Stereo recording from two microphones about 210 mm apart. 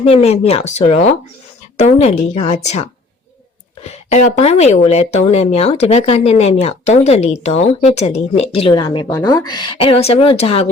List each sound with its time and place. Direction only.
0.0 s speech: 30° left (ahead or behind)
3.8 s speech: 30° left (ahead or behind)